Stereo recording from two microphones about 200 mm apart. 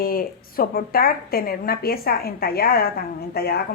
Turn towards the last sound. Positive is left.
turn(degrees=50)  # may be behind; listen again after turning